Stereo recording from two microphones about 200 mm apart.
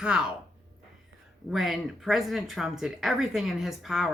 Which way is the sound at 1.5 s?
Centre (ahead or behind).